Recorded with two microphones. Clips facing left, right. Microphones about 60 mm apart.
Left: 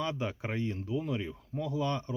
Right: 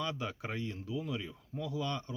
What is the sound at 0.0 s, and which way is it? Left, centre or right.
Speech, left.